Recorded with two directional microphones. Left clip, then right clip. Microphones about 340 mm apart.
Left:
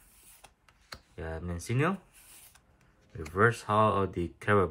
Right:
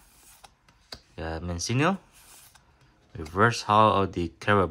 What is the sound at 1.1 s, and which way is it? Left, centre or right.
Speech, centre.